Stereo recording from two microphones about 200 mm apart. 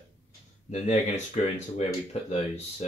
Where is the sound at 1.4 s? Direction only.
35° left (ahead or behind).